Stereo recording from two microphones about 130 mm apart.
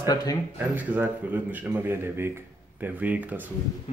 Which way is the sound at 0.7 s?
15° right (ahead or behind).